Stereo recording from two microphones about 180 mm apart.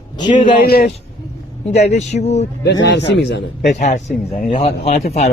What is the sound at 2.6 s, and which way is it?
Speech, 75° left (ahead or behind).